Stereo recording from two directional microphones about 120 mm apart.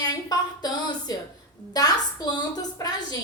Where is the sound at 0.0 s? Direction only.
35° left (ahead or behind).